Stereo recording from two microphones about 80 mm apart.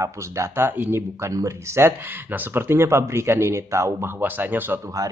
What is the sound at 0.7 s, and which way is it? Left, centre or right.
Speech, right.